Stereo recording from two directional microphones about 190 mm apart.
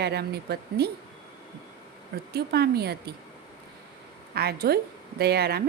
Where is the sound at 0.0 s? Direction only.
60° right (ahead or behind).